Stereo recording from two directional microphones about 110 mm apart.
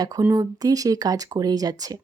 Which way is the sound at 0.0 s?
30° right (ahead or behind).